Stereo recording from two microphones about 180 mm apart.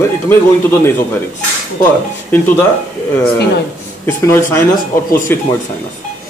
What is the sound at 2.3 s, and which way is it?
Speech, 15° left (ahead or behind).